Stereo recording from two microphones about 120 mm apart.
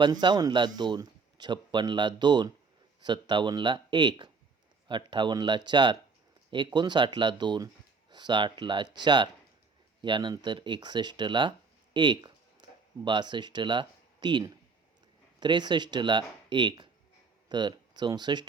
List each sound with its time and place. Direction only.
0.0 s speech: 40° right (ahead or behind)
11.9 s a sound: 40° right (ahead or behind)
13.1 s speech: 40° right (ahead or behind)